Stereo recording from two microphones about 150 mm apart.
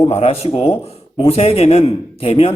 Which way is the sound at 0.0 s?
40° left (ahead or behind).